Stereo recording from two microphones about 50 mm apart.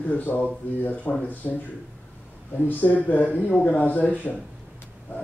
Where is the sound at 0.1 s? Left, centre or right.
Left.